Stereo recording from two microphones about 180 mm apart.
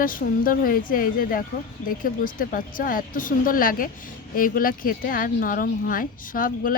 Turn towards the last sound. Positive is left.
turn(degrees=50)  # may be behind; listen again after turning